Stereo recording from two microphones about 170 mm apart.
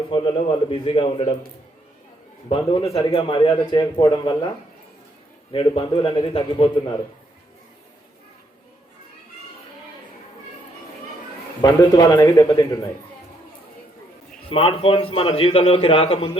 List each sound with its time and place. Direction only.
0.1 s speech: 30° left (ahead or behind)
2.9 s a man's voice: 30° left (ahead or behind)
11.6 s speech: 20° left (ahead or behind)
14.5 s a man's voice: 35° left (ahead or behind)